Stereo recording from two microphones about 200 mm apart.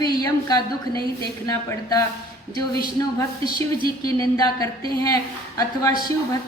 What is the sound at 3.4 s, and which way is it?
Speech, 25° right (ahead or behind).